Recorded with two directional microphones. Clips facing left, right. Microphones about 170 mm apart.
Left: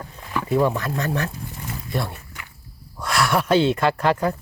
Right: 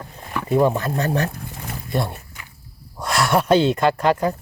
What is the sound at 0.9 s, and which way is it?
Speech, 35° right (ahead or behind).